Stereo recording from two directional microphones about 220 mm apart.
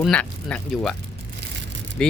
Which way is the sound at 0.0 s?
5° left (ahead or behind).